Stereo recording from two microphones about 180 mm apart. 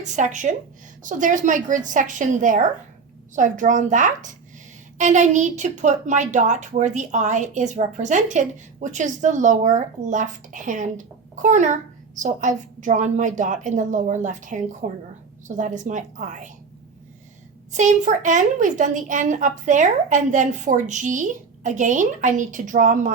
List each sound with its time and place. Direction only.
0.0 s a woman's voice: 40° right (ahead or behind)
17.7 s a woman's voice: 45° right (ahead or behind)